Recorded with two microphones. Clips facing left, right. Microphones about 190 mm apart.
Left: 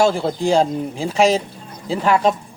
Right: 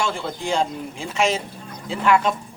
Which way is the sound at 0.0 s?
35° left (ahead or behind).